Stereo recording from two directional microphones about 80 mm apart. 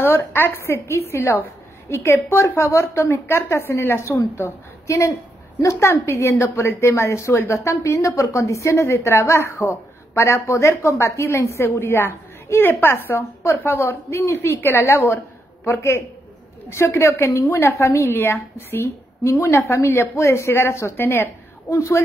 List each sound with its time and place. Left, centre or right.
0.0 s a woman's voice: left
21.6 s a woman's voice: left